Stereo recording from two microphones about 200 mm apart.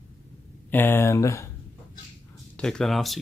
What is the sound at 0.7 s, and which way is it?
Speech, 10° left (ahead or behind).